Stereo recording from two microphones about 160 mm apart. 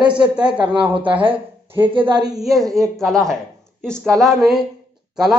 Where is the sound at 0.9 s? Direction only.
35° right (ahead or behind).